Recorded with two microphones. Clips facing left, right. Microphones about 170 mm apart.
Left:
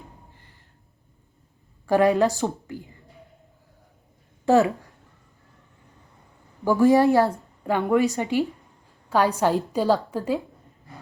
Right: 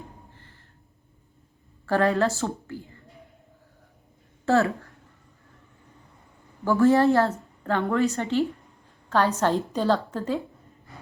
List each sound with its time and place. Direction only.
1.9 s a woman's voice: 15° left (ahead or behind)
4.4 s speech: 15° left (ahead or behind)
6.7 s a woman's voice: 10° left (ahead or behind)